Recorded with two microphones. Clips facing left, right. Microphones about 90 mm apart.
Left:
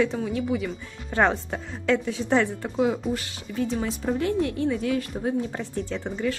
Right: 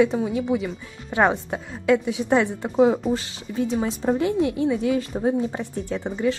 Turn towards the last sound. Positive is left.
turn(degrees=-10)  # may be behind; listen again after turning